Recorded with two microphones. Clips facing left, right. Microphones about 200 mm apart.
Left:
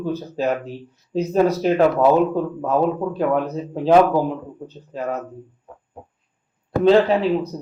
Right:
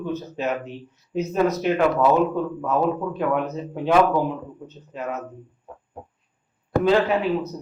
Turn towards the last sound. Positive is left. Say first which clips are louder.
# left 4 dB
turn(degrees=30)  # may be behind; listen again after turning